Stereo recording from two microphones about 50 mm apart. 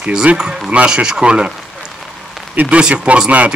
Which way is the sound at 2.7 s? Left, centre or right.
Right.